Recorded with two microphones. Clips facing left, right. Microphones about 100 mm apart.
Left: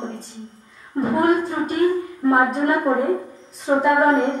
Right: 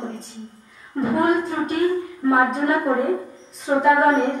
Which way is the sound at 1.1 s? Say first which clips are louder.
Left 1 dB; centre (ahead or behind).